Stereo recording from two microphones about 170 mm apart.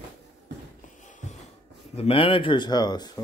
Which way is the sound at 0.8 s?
45° left (ahead or behind).